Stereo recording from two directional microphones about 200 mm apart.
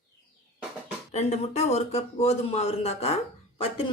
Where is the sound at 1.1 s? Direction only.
35° left (ahead or behind).